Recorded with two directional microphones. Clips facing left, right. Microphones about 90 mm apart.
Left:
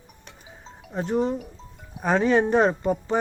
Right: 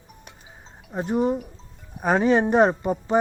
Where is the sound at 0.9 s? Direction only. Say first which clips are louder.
Right 1 dB; 15° right (ahead or behind).